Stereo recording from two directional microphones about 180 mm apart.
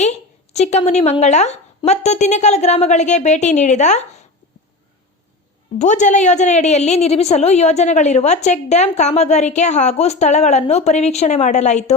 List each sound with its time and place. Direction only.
0.0 s a woman's voice: 40° left (ahead or behind)
5.8 s a woman's voice: 40° left (ahead or behind)